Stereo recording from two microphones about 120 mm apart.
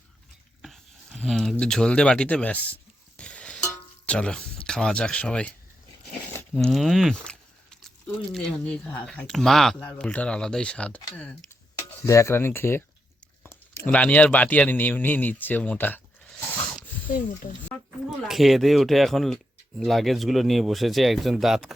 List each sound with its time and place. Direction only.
0.6 s speech: centre (ahead or behind)
3.2 s a sound: 10° left (ahead or behind)
4.0 s speech: 10° left (ahead or behind)
6.6 s speech: 5° left (ahead or behind)
12.0 s speech: 25° left (ahead or behind)
18.2 s speech: centre (ahead or behind)